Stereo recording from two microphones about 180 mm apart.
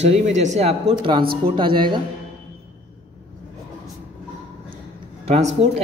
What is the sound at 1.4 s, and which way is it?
Speech, 30° right (ahead or behind).